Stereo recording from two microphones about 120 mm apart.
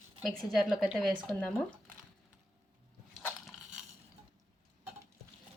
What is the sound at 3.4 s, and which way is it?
Crushing, 5° right (ahead or behind).